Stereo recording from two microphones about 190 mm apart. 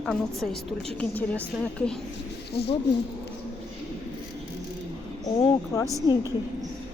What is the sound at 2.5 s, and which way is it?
Speech, 60° left (ahead or behind).